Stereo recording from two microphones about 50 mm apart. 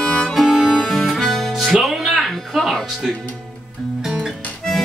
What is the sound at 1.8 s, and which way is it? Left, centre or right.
Music, centre.